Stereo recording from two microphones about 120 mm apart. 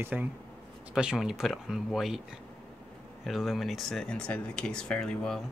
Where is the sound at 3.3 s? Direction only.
Centre (ahead or behind).